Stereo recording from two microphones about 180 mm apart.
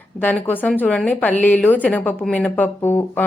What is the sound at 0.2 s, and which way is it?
A woman's voice, 10° left (ahead or behind).